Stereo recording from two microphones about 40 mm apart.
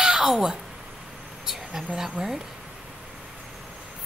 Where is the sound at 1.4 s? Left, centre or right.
Centre.